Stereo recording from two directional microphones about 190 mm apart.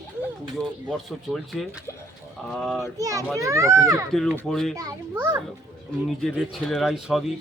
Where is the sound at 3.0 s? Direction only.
15° right (ahead or behind).